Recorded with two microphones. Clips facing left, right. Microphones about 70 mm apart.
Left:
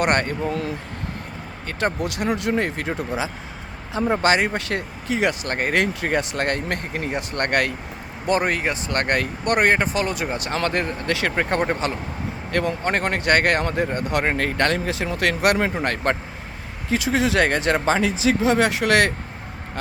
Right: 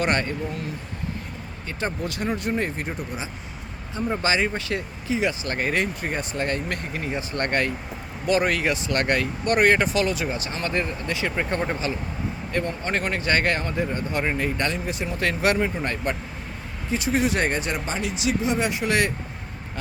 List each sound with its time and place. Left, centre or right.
0.0 s speech: left
1.6 s speech: left
4.1 s speech: left
5.5 s speech: left
5.7 s speech: left
8.3 s speech: left
10.5 s speech: left
12.5 s speech: left
12.9 s speech: left
16.9 s speech: left